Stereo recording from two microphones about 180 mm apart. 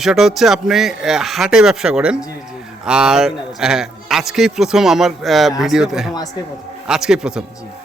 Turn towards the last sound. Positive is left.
turn(degrees=-5)  # may be behind; listen again after turning